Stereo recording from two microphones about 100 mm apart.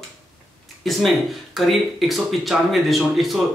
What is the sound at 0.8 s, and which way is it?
Speech, centre (ahead or behind).